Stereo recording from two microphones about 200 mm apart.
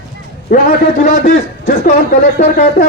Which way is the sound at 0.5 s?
40° left (ahead or behind).